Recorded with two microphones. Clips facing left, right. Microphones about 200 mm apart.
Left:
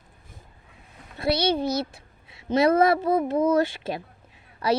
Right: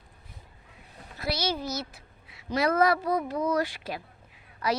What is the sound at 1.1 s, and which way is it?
A woman's voice, 30° left (ahead or behind).